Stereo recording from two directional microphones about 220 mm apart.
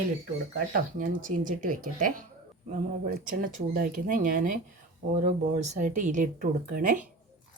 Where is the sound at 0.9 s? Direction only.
35° right (ahead or behind).